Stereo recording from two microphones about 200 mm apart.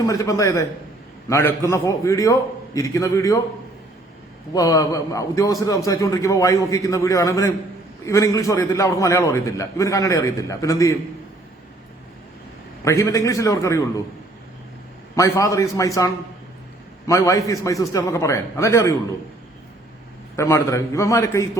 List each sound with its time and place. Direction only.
0.0 s a man's voice: 15° left (ahead or behind)
4.5 s a man's voice: 15° left (ahead or behind)
12.8 s a man's voice: 15° left (ahead or behind)
15.1 s a man's voice: 15° left (ahead or behind)
20.3 s a man's voice: 15° left (ahead or behind)